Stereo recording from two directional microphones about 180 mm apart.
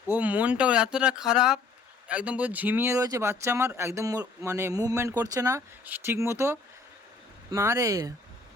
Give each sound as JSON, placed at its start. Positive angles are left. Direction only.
{"t": 0.1, "sound": "speech", "side_deg": -10}